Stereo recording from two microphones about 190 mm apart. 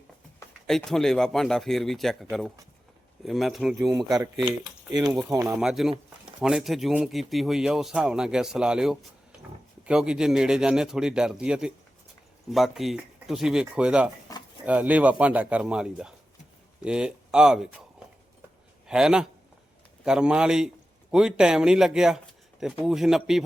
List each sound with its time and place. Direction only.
0.7 s a man's voice: centre (ahead or behind)
3.2 s a man's voice: centre (ahead or behind)
3.9 s speech: 15° right (ahead or behind)
5.3 s speech: 15° right (ahead or behind)
5.5 s a man's voice: centre (ahead or behind)
18.9 s a man's voice: 5° right (ahead or behind)